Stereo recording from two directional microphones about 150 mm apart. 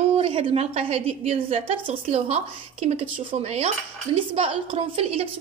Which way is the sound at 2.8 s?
45° right (ahead or behind).